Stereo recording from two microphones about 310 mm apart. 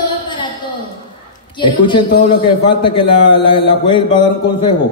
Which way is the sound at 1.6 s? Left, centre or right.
Centre.